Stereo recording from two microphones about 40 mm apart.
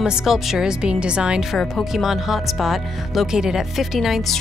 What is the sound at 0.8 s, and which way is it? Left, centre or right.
Speech, right.